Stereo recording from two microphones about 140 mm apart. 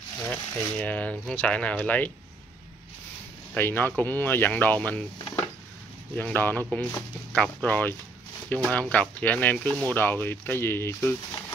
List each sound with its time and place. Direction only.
0.3 s speech: 10° left (ahead or behind)
3.5 s speech: 15° left (ahead or behind)
6.1 s speech: 15° left (ahead or behind)